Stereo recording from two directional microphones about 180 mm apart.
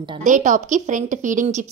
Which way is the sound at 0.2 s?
45° right (ahead or behind).